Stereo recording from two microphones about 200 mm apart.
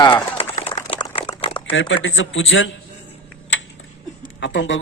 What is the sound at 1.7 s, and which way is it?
Speech, 65° left (ahead or behind).